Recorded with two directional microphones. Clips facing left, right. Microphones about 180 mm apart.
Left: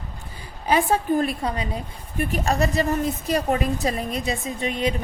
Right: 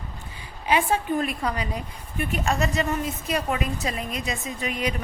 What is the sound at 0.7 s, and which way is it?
A woman's voice, 40° left (ahead or behind).